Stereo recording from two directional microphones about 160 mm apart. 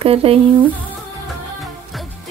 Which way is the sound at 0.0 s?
35° right (ahead or behind).